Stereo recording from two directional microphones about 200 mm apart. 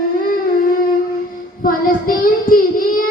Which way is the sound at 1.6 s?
45° left (ahead or behind).